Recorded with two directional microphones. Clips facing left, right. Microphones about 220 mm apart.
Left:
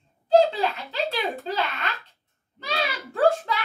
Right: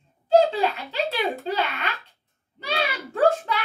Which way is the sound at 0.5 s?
Centre (ahead or behind).